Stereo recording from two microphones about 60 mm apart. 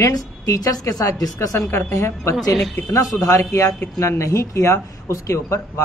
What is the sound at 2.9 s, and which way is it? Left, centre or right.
Speech, left.